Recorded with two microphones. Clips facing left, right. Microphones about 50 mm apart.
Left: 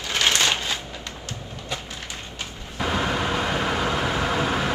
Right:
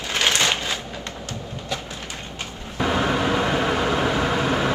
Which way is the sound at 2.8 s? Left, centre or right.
Centre.